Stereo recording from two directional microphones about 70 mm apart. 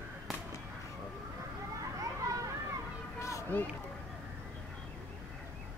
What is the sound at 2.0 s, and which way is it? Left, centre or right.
Children playing, right.